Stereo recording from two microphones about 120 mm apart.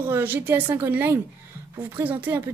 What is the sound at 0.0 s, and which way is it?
A woman's voice, 15° right (ahead or behind).